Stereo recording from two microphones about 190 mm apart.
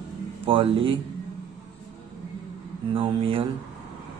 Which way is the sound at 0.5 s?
30° right (ahead or behind).